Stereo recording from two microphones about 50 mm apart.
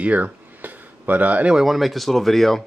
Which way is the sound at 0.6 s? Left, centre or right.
Right.